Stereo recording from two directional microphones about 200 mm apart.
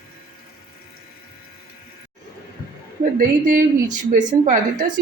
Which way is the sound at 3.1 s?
45° right (ahead or behind).